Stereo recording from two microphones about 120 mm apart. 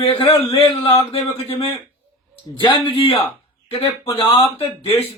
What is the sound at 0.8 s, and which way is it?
Speech, 50° left (ahead or behind).